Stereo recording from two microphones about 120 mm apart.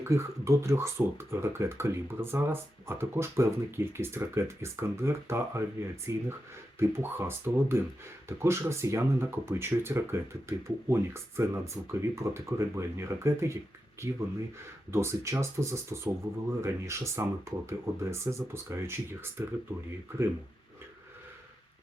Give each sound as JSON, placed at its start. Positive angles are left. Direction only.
{"t": 0.0, "sound": "speech", "side_deg": -25}
{"t": 14.9, "sound": "speech", "side_deg": -25}